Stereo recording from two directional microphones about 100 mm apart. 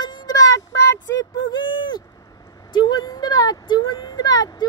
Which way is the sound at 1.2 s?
50° left (ahead or behind).